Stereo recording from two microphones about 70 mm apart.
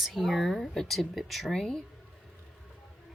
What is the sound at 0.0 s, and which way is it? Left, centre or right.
Speech, centre.